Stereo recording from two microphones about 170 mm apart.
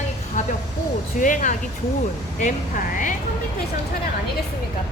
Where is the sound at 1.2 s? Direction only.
50° left (ahead or behind).